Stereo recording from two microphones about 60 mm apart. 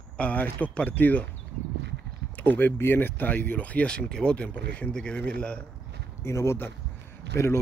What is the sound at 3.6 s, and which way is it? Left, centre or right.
Speech, left.